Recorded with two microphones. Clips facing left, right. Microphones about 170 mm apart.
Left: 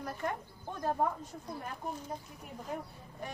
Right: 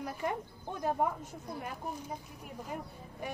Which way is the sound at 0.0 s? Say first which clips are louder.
Right 2 dB; 10° right (ahead or behind).